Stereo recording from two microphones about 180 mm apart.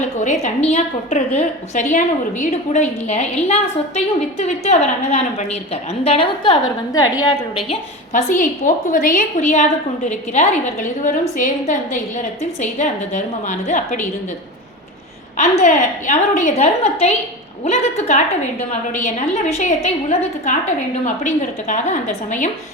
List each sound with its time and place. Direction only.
0.0 s a woman's voice: 40° left (ahead or behind); by 7.8 s 25° left (ahead or behind)
8.1 s a woman's voice: 45° left (ahead or behind)
15.6 s a woman's voice: 40° left (ahead or behind)